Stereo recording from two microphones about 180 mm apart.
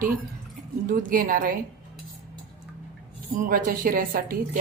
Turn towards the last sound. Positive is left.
turn(degrees=-50)  # may be behind; listen again after turning